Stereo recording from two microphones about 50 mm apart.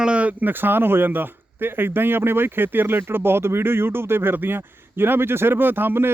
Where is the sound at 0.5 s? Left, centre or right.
Right.